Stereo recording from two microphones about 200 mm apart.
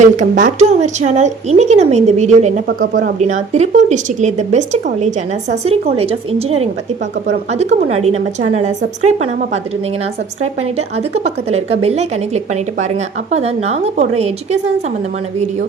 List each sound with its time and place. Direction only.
0.0 s a woman's voice: 40° right (ahead or behind)